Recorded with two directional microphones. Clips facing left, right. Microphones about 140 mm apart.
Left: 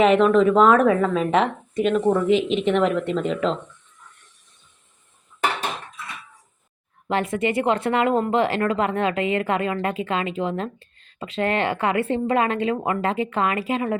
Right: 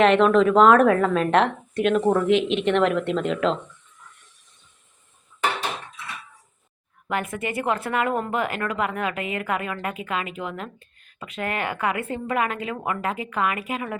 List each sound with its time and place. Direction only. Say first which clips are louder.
0.0 s a woman's voice: left 1 dB; centre (ahead or behind)
7.1 s speech: left 5 dB; 25° left (ahead or behind)